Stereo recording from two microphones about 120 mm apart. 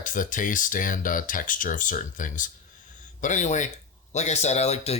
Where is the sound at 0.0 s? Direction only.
90° left.